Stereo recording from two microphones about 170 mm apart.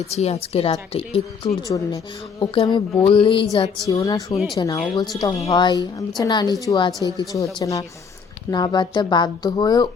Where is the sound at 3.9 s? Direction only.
20° left (ahead or behind).